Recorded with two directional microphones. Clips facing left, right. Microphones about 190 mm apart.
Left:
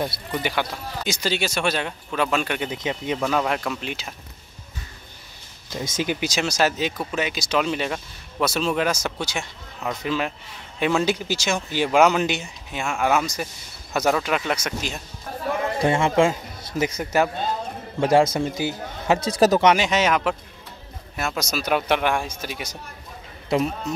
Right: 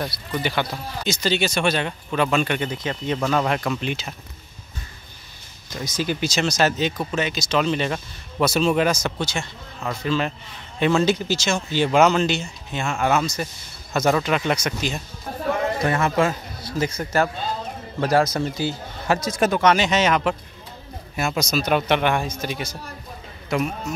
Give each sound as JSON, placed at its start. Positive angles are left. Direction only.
{"t": 0.0, "sound": "speech", "side_deg": 10}
{"t": 2.7, "sound": "speech", "side_deg": 15}
{"t": 3.2, "sound": "speech", "side_deg": 0}
{"t": 5.7, "sound": "a man's voice", "side_deg": 25}
{"t": 12.8, "sound": "speech", "side_deg": 0}
{"t": 15.8, "sound": "a man's voice", "side_deg": 25}
{"t": 19.2, "sound": "speech", "side_deg": 35}
{"t": 19.6, "sound": "speech", "side_deg": 10}